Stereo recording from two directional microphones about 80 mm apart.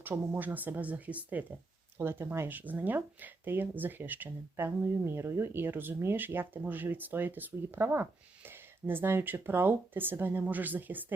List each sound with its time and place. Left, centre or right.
0.0 s speech: right